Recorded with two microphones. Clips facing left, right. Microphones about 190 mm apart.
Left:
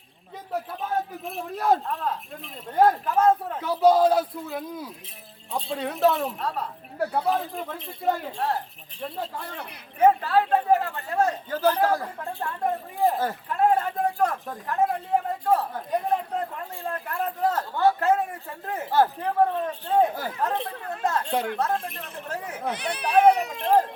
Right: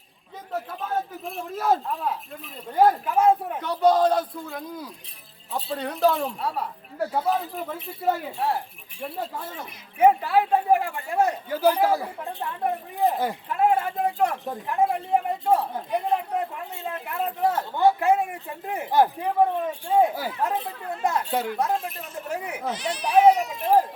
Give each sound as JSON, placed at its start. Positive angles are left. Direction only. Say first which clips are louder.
{"t": 0.7, "sound": "speech", "louder": "even", "side_deg": 0}
{"t": 3.6, "sound": "speech", "louder": "left 3 dB", "side_deg": 5}
{"t": 6.4, "sound": "speech", "louder": "right 1 dB", "side_deg": -10}
{"t": 15.5, "sound": "speech", "louder": "right 1 dB", "side_deg": -10}
{"t": 22.6, "sound": "speech", "louder": "left 2 dB", "side_deg": 60}
{"t": 23.5, "sound": "speech", "louder": "right 1 dB", "side_deg": -10}